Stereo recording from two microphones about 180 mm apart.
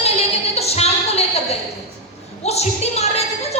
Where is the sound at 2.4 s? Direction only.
35° left (ahead or behind).